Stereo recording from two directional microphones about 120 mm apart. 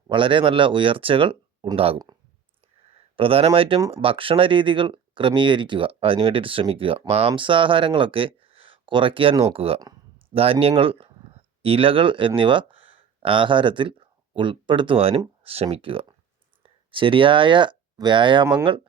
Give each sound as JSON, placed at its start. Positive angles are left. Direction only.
{"t": 0.1, "sound": "speech", "side_deg": -45}
{"t": 3.2, "sound": "speech", "side_deg": -50}
{"t": 12.7, "sound": "a sound", "side_deg": -15}
{"t": 13.2, "sound": "speech", "side_deg": -45}